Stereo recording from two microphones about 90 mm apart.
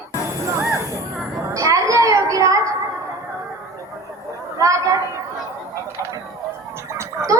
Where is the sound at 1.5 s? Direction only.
40° right (ahead or behind).